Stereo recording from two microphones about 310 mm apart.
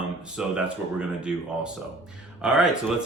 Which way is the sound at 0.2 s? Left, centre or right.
Centre.